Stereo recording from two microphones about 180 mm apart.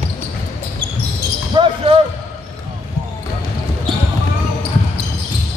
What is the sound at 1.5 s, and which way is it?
Basketball bounce, 30° right (ahead or behind).